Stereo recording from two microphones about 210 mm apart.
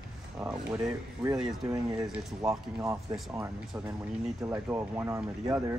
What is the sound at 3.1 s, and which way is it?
Speech, centre (ahead or behind).